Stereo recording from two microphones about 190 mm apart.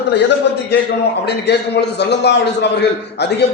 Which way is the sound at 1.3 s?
60° left (ahead or behind).